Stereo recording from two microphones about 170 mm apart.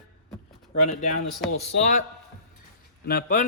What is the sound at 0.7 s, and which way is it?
Speech, 55° left (ahead or behind).